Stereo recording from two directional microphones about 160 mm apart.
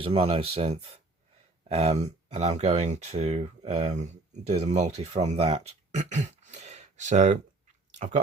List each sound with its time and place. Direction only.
0.0 s speech: 35° right (ahead or behind)